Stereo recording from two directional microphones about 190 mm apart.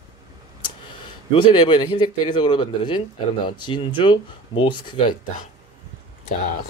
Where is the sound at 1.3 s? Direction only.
25° left (ahead or behind).